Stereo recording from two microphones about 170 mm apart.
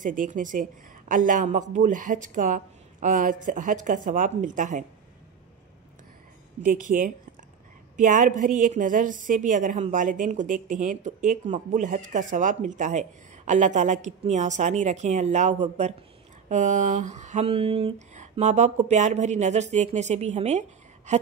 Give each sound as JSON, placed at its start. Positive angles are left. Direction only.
{"t": 0.0, "sound": "a woman's voice", "side_deg": -50}
{"t": 6.6, "sound": "a woman's voice", "side_deg": -55}
{"t": 21.1, "sound": "a sound", "side_deg": -45}